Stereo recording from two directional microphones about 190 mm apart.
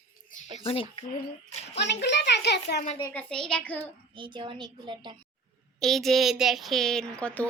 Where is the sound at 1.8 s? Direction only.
65° left (ahead or behind).